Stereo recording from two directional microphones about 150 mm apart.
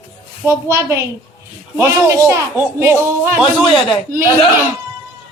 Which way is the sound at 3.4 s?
Centre (ahead or behind).